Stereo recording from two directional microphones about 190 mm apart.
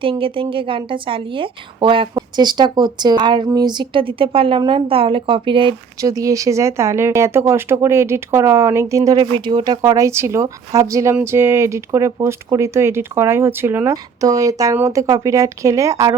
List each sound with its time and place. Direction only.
0.0 s a woman's voice: 25° right (ahead or behind)
6.1 s speech: 15° right (ahead or behind)